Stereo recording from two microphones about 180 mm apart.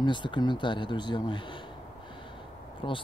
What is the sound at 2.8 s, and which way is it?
Speech, 30° left (ahead or behind).